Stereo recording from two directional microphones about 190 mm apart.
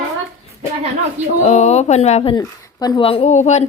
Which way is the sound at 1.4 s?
35° left (ahead or behind).